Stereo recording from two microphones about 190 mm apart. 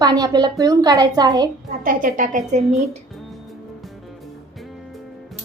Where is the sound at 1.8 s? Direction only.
45° right (ahead or behind).